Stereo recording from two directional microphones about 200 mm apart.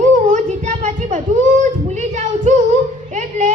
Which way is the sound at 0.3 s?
40° right (ahead or behind).